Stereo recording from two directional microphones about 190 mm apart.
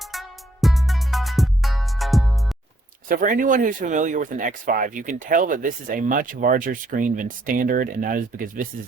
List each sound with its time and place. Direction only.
0.0 s music: centre (ahead or behind)
3.1 s speech: 45° right (ahead or behind)